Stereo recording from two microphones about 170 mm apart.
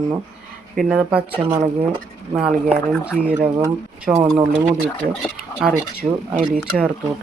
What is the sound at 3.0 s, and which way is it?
Speech, 5° right (ahead or behind).